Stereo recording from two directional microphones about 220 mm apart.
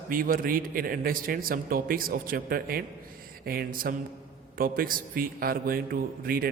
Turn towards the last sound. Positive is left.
turn(degrees=-40)  # may be behind; listen again after turning